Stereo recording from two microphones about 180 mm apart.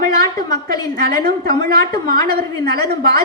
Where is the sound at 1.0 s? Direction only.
60° right (ahead or behind).